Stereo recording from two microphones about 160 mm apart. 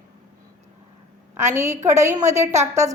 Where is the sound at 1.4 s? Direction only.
15° right (ahead or behind).